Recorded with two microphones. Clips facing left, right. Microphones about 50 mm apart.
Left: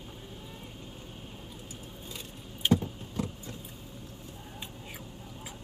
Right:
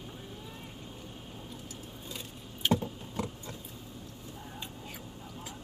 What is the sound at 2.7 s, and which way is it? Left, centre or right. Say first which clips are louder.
Vehicle: left 2 dB; right.